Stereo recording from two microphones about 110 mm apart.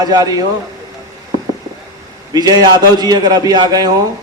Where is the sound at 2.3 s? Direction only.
35° right (ahead or behind).